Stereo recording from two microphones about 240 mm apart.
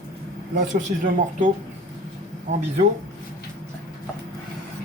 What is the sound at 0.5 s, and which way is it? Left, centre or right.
Speech, right.